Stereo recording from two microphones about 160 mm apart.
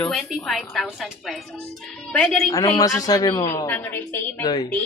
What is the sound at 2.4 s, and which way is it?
Speech, 25° left (ahead or behind).